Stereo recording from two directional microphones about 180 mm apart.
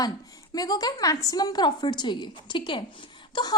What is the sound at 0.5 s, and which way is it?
A woman's voice, 20° left (ahead or behind).